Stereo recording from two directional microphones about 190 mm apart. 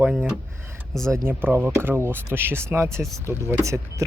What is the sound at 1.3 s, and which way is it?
Speech, 10° right (ahead or behind).